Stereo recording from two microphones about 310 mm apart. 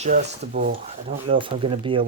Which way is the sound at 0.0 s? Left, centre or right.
Right.